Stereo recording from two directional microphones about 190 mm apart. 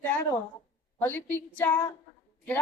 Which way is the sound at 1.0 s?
10° left (ahead or behind).